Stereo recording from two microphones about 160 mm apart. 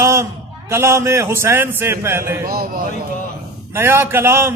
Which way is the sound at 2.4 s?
65° right (ahead or behind).